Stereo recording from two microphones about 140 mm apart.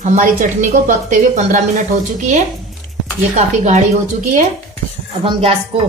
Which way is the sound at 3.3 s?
55° right (ahead or behind).